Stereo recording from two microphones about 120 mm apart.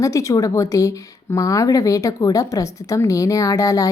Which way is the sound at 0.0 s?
25° left (ahead or behind).